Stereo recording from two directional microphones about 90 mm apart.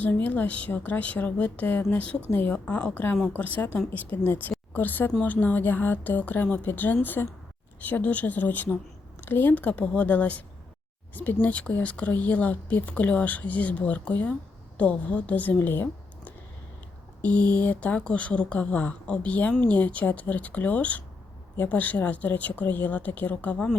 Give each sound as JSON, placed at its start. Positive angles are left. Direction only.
{"t": 0.0, "sound": "a woman's voice", "side_deg": 20}
{"t": 17.6, "sound": "speech", "side_deg": 15}